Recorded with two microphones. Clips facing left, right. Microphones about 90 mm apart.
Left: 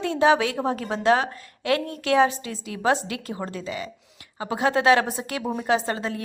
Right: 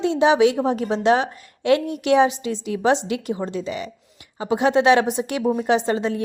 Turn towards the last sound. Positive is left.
turn(degrees=-25)  # may be behind; listen again after turning